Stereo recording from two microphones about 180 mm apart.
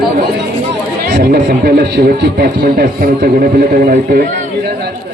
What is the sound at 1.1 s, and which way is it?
A man's voice, 60° right (ahead or behind).